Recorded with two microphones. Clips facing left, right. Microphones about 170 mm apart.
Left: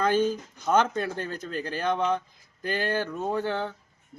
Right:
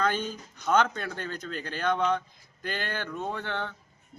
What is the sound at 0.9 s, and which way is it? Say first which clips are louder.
Speech: left 5 dB; 30° left (ahead or behind).